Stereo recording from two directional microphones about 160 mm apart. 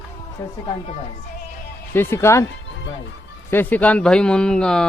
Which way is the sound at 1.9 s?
15° left (ahead or behind).